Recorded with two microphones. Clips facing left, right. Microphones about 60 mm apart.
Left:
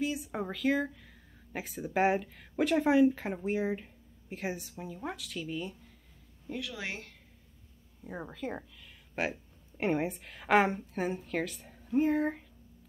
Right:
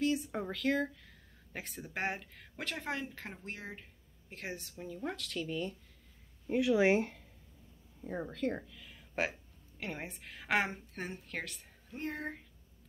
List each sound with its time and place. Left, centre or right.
0.0 s a woman's voice: centre
6.5 s speech: right
8.1 s speech: centre
8.8 s a sound: centre
9.9 s a woman's voice: centre